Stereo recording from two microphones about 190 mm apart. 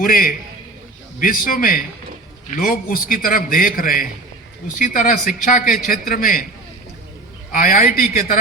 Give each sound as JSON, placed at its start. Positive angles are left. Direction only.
{"t": 0.0, "sound": "a man's voice", "side_deg": 50}
{"t": 7.5, "sound": "a man's voice", "side_deg": 45}